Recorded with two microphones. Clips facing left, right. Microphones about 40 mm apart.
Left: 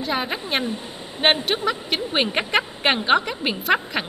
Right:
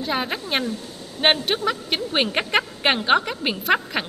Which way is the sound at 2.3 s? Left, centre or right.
Centre.